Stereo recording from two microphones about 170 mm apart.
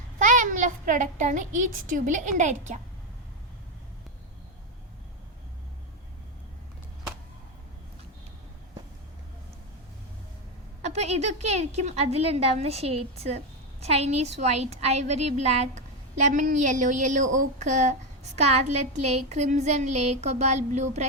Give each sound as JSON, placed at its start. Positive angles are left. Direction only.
{"t": 0.2, "sound": "a sound", "side_deg": -50}
{"t": 2.0, "sound": "a woman's voice", "side_deg": -50}
{"t": 10.8, "sound": "a woman's voice", "side_deg": -40}